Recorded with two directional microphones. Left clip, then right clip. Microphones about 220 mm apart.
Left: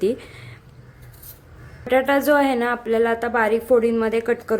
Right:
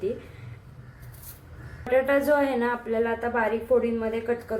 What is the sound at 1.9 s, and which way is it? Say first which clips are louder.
A woman's voice: left 4 dB; 40° left (ahead or behind).